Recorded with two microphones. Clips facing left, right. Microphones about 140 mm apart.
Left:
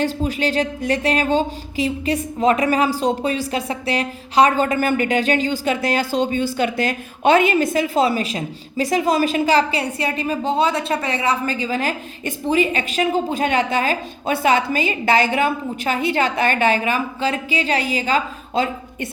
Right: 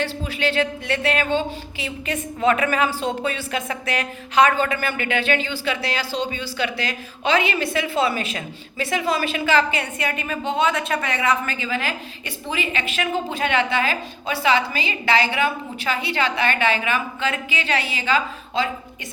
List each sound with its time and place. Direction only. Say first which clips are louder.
0.0 s a woman's voice: left 4 dB; 40° left (ahead or behind)